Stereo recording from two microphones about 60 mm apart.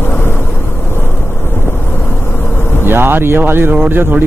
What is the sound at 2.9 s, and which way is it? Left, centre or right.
Speech, right.